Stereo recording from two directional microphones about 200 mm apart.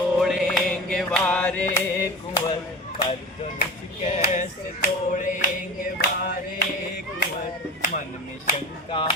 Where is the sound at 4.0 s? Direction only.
30° left (ahead or behind); by 6.6 s 50° left (ahead or behind).